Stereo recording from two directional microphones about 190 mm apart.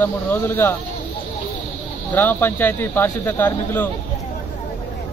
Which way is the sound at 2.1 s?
10° left (ahead or behind).